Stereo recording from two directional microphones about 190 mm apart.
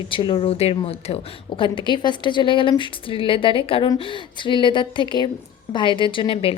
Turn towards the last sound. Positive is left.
turn(degrees=25)  # may be behind; listen again after turning